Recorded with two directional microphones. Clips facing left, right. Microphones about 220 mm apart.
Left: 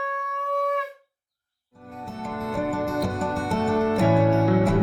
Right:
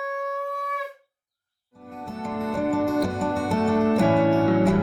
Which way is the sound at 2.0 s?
Centre (ahead or behind).